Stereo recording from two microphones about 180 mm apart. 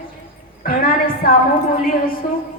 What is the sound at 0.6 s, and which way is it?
Speech, 50° left (ahead or behind).